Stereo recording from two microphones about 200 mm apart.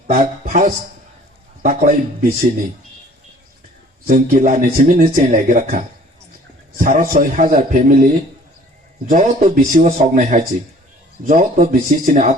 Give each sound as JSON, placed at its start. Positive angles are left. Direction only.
{"t": 0.1, "sound": "speech", "side_deg": -40}
{"t": 4.0, "sound": "speech", "side_deg": -40}
{"t": 9.0, "sound": "speech", "side_deg": -40}